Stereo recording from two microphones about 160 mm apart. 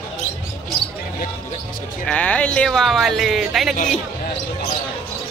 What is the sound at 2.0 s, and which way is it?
Speech, 10° left (ahead or behind).